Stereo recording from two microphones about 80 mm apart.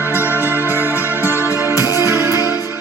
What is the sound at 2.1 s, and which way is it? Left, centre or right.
Music, right.